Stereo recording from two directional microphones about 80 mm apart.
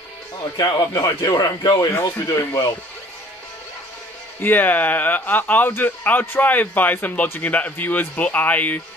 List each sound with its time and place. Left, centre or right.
0.4 s speech: left
2.2 s speech: left
4.4 s speech: left